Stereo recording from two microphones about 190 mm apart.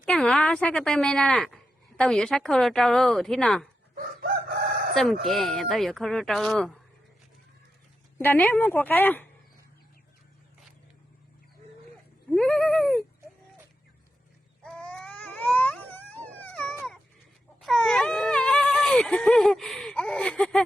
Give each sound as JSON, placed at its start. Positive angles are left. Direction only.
{"t": 0.0, "sound": "a woman's voice", "side_deg": 5}
{"t": 3.9, "sound": "crowing", "side_deg": -50}
{"t": 5.2, "sound": "a woman's voice", "side_deg": 0}
{"t": 8.2, "sound": "speech", "side_deg": 10}
{"t": 12.3, "sound": "a sound", "side_deg": 0}
{"t": 14.6, "sound": "baby cry", "side_deg": 5}
{"t": 17.6, "sound": "wail", "side_deg": 0}